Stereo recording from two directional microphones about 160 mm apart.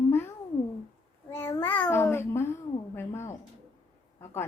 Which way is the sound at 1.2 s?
15° left (ahead or behind).